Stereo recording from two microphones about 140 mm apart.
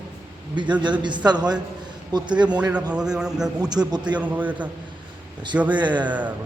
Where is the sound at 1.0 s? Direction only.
30° right (ahead or behind).